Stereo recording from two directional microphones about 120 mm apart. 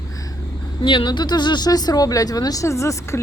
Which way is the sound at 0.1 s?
30° left (ahead or behind).